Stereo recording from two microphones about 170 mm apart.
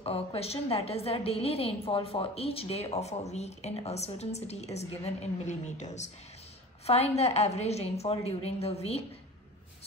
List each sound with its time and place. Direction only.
0.0 s a woman's voice: 35° left (ahead or behind)